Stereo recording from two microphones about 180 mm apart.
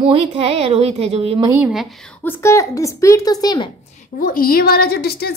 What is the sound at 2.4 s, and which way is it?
Speech, 15° left (ahead or behind).